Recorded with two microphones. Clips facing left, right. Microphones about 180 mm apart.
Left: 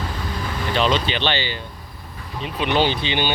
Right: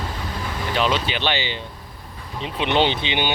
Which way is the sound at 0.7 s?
10° right (ahead or behind).